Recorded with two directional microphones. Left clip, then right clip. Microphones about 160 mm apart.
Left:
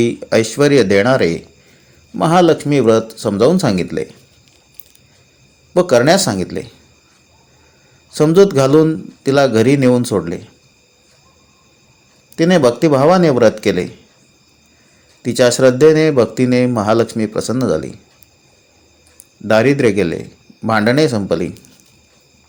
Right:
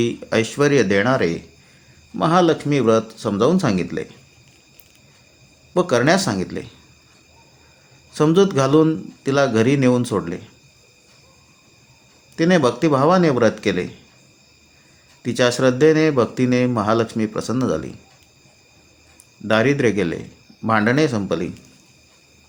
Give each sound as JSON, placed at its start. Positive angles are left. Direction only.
{"t": 0.0, "sound": "speech", "side_deg": 20}
{"t": 5.7, "sound": "speech", "side_deg": 20}
{"t": 8.1, "sound": "speech", "side_deg": 20}
{"t": 12.4, "sound": "speech", "side_deg": 20}
{"t": 15.2, "sound": "speech", "side_deg": 20}
{"t": 19.5, "sound": "speech", "side_deg": 20}